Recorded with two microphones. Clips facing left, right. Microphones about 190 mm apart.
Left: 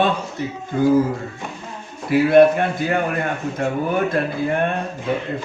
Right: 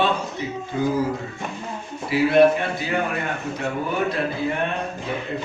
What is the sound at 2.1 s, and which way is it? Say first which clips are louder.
Speech: left 3 dB; 50° left (ahead or behind).